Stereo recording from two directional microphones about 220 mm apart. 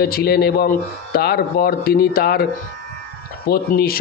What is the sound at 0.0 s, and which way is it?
A man's voice, 45° left (ahead or behind).